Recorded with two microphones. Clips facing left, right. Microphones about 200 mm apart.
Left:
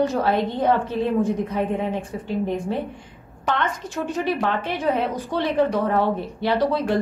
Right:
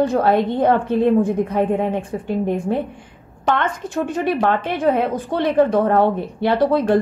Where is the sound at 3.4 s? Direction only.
55° right (ahead or behind).